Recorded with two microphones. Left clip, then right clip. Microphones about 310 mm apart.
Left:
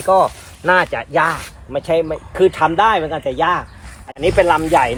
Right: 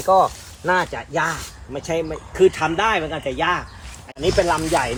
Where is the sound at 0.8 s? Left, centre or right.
Centre.